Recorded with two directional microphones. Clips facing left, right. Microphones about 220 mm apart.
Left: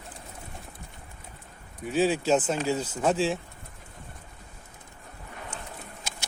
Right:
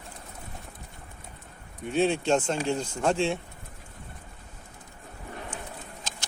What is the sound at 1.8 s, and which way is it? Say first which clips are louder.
Speech: even; 5° left (ahead or behind).